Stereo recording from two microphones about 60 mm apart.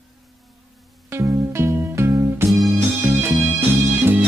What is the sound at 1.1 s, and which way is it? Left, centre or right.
Music, right.